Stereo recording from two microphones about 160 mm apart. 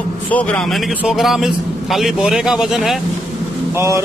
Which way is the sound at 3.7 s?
15° right (ahead or behind).